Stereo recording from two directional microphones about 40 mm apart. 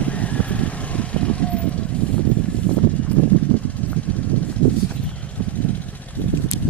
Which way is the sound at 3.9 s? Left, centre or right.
Left.